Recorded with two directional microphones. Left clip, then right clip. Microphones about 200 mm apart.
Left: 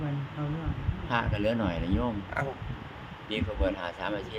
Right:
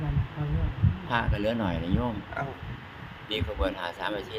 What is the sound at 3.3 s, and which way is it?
Speech, 20° right (ahead or behind).